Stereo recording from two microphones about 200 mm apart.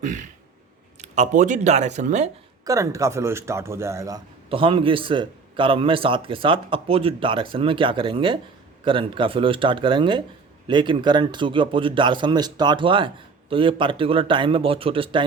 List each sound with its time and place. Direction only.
0.0 s speech: 35° right (ahead or behind)
2.6 s speech: 15° right (ahead or behind)